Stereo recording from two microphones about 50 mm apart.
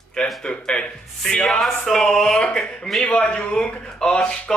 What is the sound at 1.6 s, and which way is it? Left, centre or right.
Speech, centre.